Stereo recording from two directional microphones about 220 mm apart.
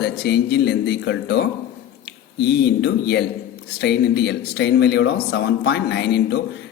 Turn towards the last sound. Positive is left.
turn(degrees=50)  # may be behind; listen again after turning